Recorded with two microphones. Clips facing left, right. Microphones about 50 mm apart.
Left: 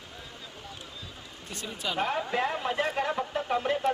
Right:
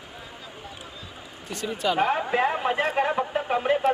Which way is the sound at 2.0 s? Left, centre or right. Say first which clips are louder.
Right 4 dB; right.